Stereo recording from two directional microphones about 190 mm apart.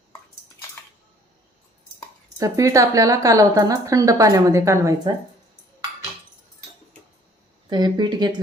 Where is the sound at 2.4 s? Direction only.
15° right (ahead or behind).